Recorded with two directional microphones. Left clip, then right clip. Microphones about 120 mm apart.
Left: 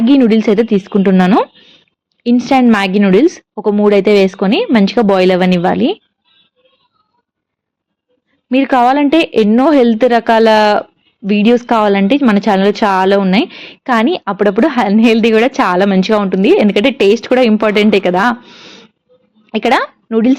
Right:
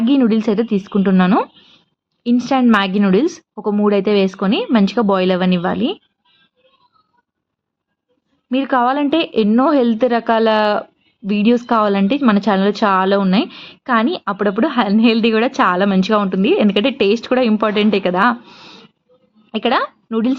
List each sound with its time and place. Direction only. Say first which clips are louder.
0.0 s a woman's voice: left 5 dB; 30° left (ahead or behind)
1.4 s a sound: left 5 dB; 15° left (ahead or behind)
2.2 s a woman's voice: left 5 dB; 30° left (ahead or behind)
8.4 s a woman's voice: left 6 dB; 35° left (ahead or behind)
18.4 s a sound: left 4 dB; 15° left (ahead or behind)
19.5 s speech: left 5 dB; 30° left (ahead or behind)